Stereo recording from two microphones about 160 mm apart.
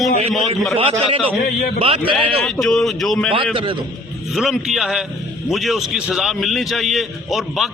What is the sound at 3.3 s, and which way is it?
Speech, 30° right (ahead or behind).